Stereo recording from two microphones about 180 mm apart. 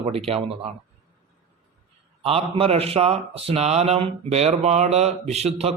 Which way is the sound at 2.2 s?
35° right (ahead or behind).